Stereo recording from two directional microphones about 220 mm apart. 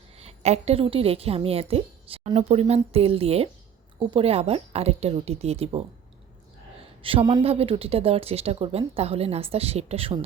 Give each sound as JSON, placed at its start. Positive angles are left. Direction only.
{"t": 0.2, "sound": "a woman's voice", "side_deg": -30}
{"t": 7.0, "sound": "a woman's voice", "side_deg": -25}